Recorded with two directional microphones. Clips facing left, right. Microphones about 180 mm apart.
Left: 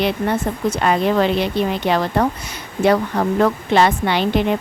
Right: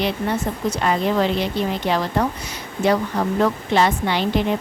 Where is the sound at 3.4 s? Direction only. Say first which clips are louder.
Left 3 dB; 65° left (ahead or behind).